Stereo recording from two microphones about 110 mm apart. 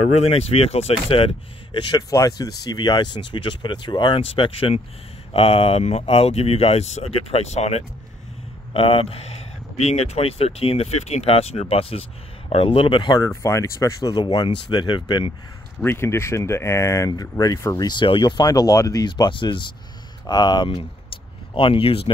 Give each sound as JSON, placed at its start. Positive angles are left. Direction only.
{"t": 0.2, "sound": "speech", "side_deg": 65}
{"t": 1.9, "sound": "speech", "side_deg": 35}
{"t": 4.2, "sound": "speech", "side_deg": 60}
{"t": 8.7, "sound": "speech", "side_deg": 60}
{"t": 13.4, "sound": "speech", "side_deg": 30}
{"t": 14.1, "sound": "speech", "side_deg": 40}
{"t": 15.8, "sound": "speech", "side_deg": 20}